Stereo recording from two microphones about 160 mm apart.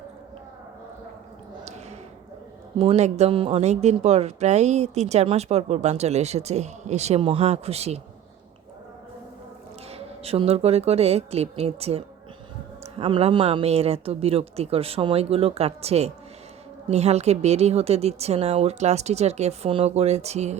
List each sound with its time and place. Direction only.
1.6 s a sound: 45° right (ahead or behind)
2.7 s speech: 40° right (ahead or behind)
9.9 s speech: 40° right (ahead or behind)